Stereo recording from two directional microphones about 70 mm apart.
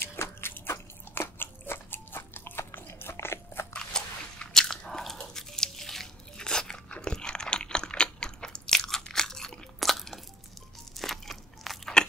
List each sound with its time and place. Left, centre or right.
0.0 s biting: left
3.7 s biting: centre
11.0 s crunch: centre